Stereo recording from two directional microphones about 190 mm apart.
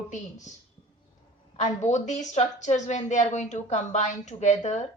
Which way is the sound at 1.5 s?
35° left (ahead or behind).